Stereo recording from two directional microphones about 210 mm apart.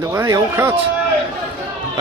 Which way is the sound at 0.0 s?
15° right (ahead or behind).